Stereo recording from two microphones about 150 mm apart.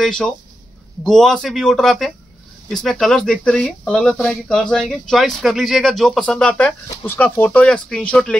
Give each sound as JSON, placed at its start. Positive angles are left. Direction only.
{"t": 0.0, "sound": "speech", "side_deg": 5}
{"t": 6.9, "sound": "speech", "side_deg": 15}